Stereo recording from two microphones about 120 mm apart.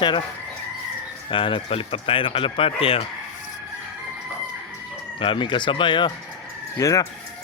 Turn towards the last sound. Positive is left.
turn(degrees=30)  # may be behind; listen again after turning